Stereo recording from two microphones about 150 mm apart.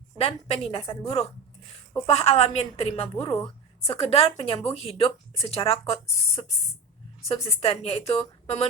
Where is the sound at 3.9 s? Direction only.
40° left (ahead or behind).